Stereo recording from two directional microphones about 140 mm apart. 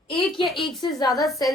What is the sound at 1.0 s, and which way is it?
Speech, 25° left (ahead or behind).